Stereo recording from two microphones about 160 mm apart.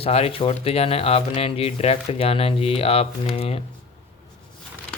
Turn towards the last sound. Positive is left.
turn(degrees=35)  # may be behind; listen again after turning